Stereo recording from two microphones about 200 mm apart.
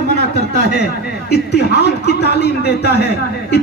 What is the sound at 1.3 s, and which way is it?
A man's voice, 55° left (ahead or behind).